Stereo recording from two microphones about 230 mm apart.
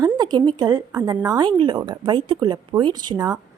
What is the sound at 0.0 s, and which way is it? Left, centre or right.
A woman's voice, centre.